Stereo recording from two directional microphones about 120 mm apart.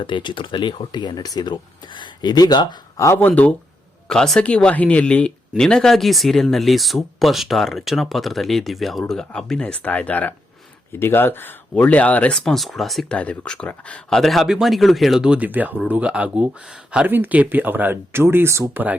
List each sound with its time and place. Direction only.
0.0 s speech: 40° left (ahead or behind)
3.1 s speech: 15° left (ahead or behind)
13.1 s speech: 10° left (ahead or behind); by 18.9 s 15° right (ahead or behind)